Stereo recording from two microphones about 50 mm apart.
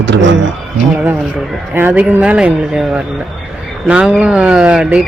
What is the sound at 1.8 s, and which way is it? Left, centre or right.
Speech, right.